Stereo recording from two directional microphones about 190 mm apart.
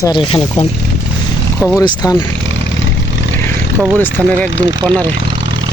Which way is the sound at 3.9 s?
5° left (ahead or behind).